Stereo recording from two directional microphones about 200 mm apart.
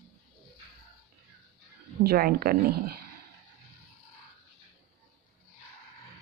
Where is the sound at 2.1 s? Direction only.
50° right (ahead or behind).